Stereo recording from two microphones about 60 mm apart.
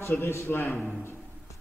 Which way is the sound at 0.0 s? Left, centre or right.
Left.